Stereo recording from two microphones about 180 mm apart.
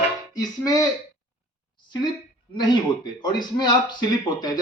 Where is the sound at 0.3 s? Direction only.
20° left (ahead or behind).